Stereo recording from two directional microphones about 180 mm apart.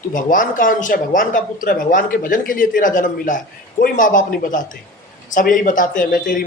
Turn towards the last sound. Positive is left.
turn(degrees=50)  # may be behind; listen again after turning